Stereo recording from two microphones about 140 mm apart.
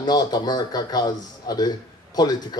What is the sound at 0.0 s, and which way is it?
Speech, 30° left (ahead or behind).